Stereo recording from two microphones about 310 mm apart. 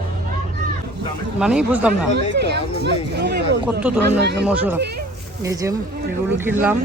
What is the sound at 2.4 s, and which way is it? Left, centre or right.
Speech, right.